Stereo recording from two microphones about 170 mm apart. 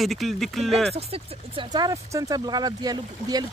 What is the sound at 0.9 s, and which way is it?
Speech, 35° right (ahead or behind).